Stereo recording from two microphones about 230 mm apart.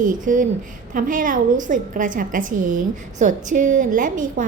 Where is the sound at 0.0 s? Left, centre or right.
Right.